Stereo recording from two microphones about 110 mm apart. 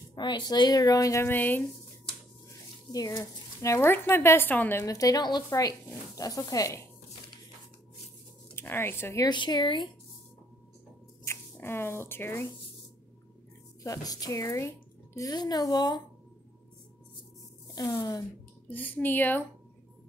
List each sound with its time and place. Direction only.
0.1 s speech: 45° left (ahead or behind)
1.3 s speech: 15° left (ahead or behind)
2.9 s speech: 35° left (ahead or behind)
4.8 s speech: 35° left (ahead or behind)
8.5 s speech: 20° left (ahead or behind)
9.3 s speech: 45° left (ahead or behind)
11.2 s speech: 20° left (ahead or behind)
13.8 s speech: 35° left (ahead or behind)
17.7 s speech: 35° left (ahead or behind)
18.7 s speech: 15° left (ahead or behind)